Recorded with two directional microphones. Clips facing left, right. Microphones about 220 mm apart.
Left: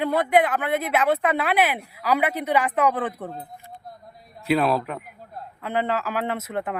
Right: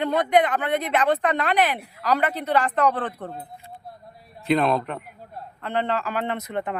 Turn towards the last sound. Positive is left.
turn(degrees=5)  # may be behind; listen again after turning